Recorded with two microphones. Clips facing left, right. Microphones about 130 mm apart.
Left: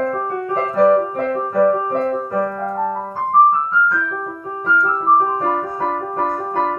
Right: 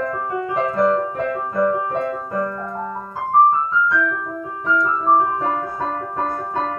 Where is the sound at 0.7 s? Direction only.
25° left (ahead or behind).